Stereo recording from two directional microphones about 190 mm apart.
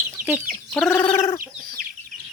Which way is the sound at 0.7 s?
5° left (ahead or behind).